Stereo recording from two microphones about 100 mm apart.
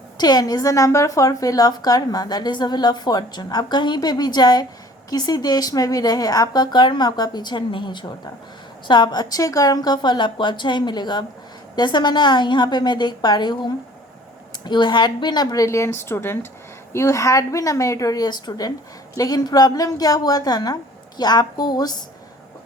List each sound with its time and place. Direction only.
0.2 s a woman's voice: 45° left (ahead or behind)
14.6 s a woman's voice: 50° left (ahead or behind)